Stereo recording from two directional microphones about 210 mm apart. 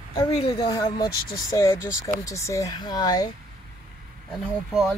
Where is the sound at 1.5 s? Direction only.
15° left (ahead or behind).